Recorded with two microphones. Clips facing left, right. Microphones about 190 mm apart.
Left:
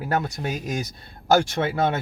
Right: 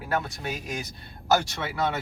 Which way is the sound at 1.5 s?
55° left (ahead or behind).